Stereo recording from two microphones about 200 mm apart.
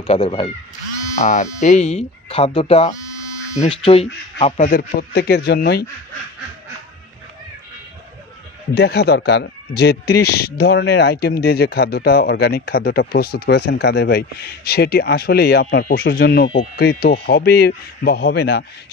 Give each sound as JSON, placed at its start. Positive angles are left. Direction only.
{"t": 0.0, "sound": "speech", "side_deg": 30}
{"t": 8.7, "sound": "a man's voice", "side_deg": 55}